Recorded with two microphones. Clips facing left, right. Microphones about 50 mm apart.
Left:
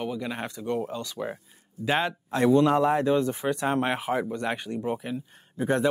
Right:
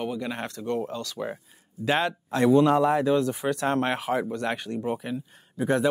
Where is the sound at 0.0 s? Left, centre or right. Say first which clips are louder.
Right 1 dB; centre.